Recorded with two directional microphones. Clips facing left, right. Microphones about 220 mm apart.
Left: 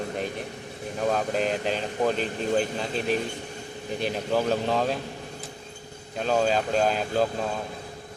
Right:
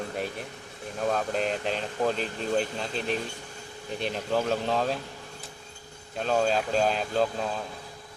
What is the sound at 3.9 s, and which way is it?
Speech, centre (ahead or behind).